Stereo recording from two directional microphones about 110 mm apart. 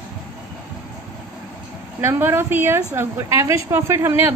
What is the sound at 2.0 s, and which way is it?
A woman's voice, 25° right (ahead or behind).